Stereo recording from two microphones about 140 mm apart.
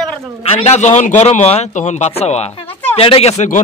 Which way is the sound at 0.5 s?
50° left (ahead or behind).